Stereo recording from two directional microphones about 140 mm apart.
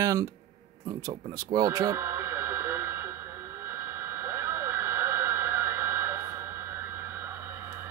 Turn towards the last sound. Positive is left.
turn(degrees=-15)  # may be behind; listen again after turning